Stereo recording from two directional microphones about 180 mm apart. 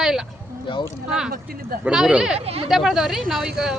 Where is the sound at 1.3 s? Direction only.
55° right (ahead or behind).